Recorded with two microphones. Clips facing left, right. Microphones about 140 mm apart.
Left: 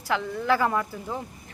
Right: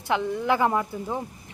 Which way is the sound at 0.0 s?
20° right (ahead or behind).